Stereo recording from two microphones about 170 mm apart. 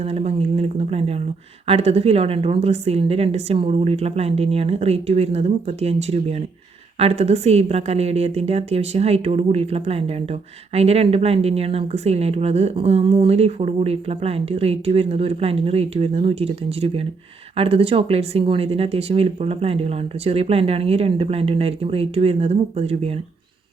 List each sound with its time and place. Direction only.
0.0 s speech: 40° right (ahead or behind)